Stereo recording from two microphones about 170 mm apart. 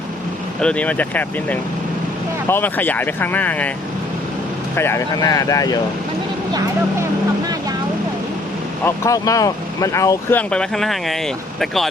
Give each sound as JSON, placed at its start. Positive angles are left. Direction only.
{"t": 0.6, "sound": "speech", "side_deg": 5}
{"t": 4.7, "sound": "speech", "side_deg": 15}
{"t": 8.8, "sound": "speech", "side_deg": 20}